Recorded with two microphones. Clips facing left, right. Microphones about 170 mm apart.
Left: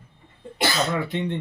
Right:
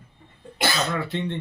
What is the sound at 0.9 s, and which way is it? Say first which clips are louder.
Speech: left 2 dB; 15° left (ahead or behind).